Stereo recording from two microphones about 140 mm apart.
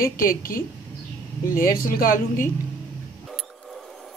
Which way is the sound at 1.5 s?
90° left.